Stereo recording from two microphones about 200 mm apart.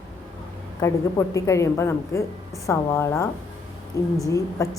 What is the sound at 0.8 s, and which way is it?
A woman's voice, 15° left (ahead or behind).